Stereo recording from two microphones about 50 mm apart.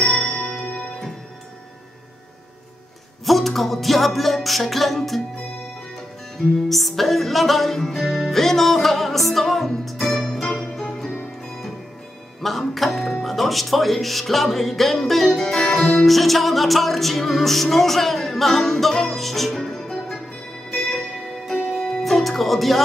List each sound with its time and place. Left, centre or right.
0.2 s music: centre
3.3 s music: centre
6.3 s music: centre
12.4 s speech: centre
21.6 s music: centre